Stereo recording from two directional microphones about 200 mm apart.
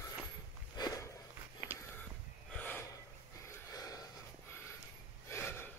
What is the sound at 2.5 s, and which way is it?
Gasp, 10° left (ahead or behind).